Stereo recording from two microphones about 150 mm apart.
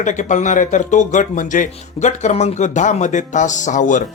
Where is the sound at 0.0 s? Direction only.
55° left (ahead or behind).